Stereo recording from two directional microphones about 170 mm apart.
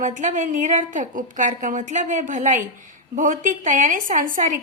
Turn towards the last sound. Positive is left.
turn(degrees=-50)  # may be behind; listen again after turning